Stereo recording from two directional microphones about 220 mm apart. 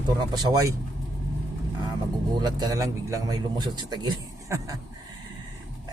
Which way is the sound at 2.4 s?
15° right (ahead or behind).